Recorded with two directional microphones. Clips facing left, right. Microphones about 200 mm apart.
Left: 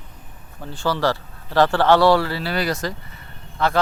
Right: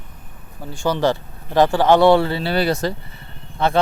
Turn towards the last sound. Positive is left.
turn(degrees=-25)  # may be behind; listen again after turning